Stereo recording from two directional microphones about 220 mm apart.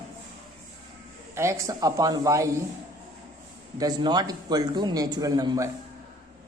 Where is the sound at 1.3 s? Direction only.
15° right (ahead or behind).